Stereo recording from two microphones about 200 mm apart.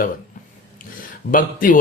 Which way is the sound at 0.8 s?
40° left (ahead or behind).